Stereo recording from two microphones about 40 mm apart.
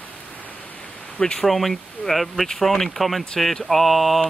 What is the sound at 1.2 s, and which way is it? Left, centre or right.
Speech, centre.